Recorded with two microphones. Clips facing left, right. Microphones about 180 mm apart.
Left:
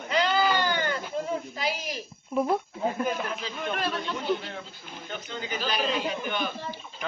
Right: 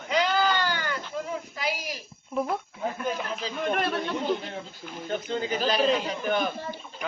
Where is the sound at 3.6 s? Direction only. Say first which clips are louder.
Right 3 dB; 55° right (ahead or behind).